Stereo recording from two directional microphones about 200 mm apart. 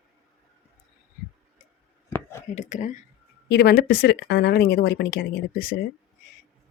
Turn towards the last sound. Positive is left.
turn(degrees=50)  # may be behind; listen again after turning